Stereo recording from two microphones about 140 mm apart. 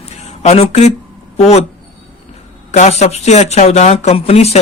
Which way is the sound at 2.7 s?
50° left (ahead or behind).